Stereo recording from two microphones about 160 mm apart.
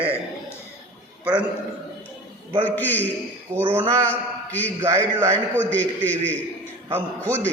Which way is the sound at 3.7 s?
15° right (ahead or behind).